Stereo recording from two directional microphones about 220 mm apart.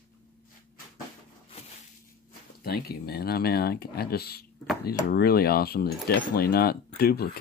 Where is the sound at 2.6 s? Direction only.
45° left (ahead or behind).